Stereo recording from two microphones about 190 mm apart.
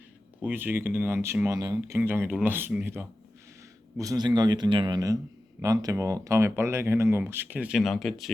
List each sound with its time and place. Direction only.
0.4 s a man's voice: 10° right (ahead or behind)